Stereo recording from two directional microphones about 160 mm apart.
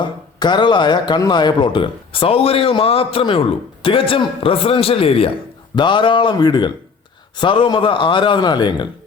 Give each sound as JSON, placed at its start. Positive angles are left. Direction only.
{"t": 0.0, "sound": "a man's voice", "side_deg": 30}